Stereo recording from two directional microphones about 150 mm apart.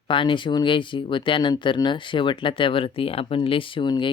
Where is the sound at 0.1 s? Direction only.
35° left (ahead or behind).